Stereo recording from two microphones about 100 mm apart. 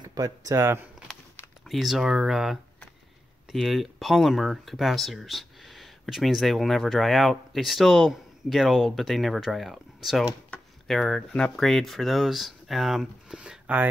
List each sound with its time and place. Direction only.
0.0 s speech: 40° right (ahead or behind)
1.7 s speech: 5° right (ahead or behind)